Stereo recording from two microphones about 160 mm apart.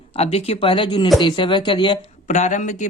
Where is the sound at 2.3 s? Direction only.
50° left (ahead or behind).